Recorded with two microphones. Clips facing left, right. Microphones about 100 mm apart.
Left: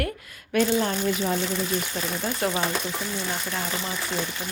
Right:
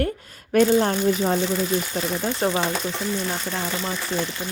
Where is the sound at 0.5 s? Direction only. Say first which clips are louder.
Right 5 dB; 45° right (ahead or behind); by 2.6 s 25° right (ahead or behind).